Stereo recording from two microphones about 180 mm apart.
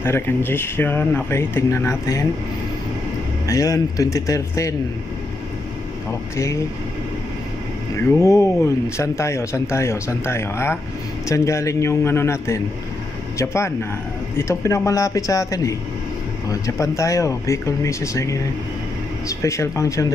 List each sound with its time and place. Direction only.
0.0 s speech: 10° left (ahead or behind)
3.4 s speech: 20° left (ahead or behind)
6.3 s speech: 15° left (ahead or behind)
7.9 s speech: 15° left (ahead or behind)
19.4 s speech: 15° left (ahead or behind)